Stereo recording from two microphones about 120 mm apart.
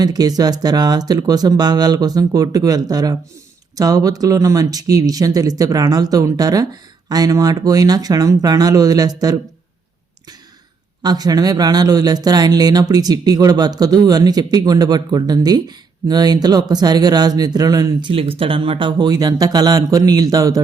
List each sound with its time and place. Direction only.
0.0 s speech: 30° right (ahead or behind)
11.0 s speech: 35° right (ahead or behind)
18.1 s speech: 50° right (ahead or behind); by 20.6 s 30° right (ahead or behind)